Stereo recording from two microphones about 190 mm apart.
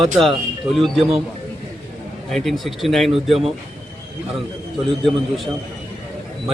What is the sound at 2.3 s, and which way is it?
Speech, centre (ahead or behind).